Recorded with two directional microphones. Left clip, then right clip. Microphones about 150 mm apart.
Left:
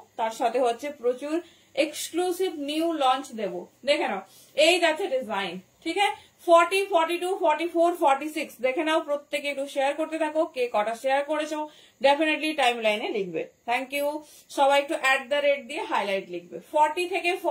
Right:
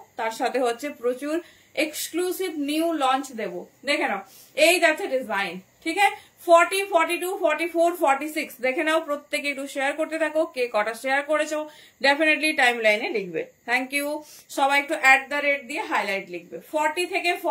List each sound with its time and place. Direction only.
0.1 s a woman's voice: 25° right (ahead or behind)